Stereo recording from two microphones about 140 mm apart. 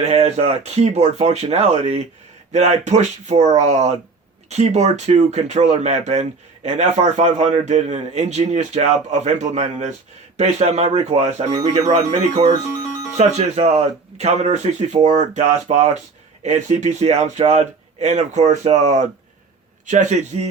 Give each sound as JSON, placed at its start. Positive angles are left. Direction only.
{"t": 0.0, "sound": "speech", "side_deg": -50}